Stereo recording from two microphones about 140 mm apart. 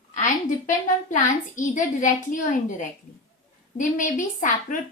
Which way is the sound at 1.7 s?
65° left (ahead or behind).